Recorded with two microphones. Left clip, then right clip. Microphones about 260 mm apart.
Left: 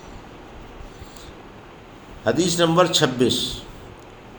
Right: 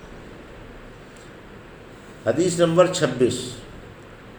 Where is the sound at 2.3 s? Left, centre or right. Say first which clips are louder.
Even; left.